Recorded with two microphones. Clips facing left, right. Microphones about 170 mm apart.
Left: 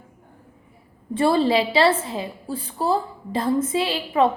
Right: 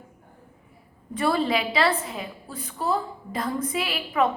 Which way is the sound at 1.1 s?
30° left (ahead or behind).